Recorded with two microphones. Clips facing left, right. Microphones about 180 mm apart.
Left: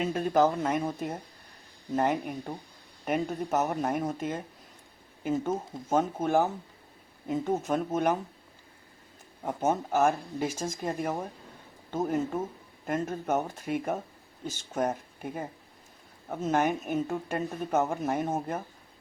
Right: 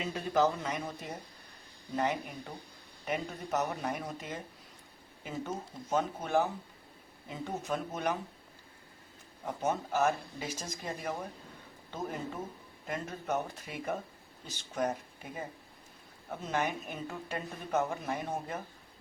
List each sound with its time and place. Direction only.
0.0 s speech: 50° left (ahead or behind)
9.5 s speech: 50° left (ahead or behind)
12.8 s speech: 50° left (ahead or behind)